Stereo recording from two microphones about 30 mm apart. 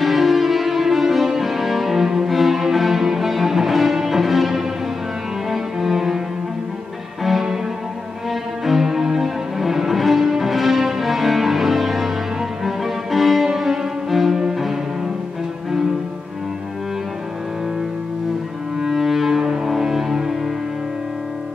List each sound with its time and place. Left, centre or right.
0.0 s music: centre
8.8 s music: centre
18.8 s music: centre
19.4 s music: right
19.8 s music: centre